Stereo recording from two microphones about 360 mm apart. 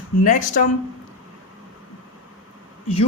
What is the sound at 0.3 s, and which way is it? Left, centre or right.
Speech, left.